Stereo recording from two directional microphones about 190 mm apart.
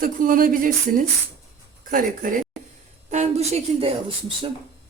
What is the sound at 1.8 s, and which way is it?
Speech, 45° right (ahead or behind).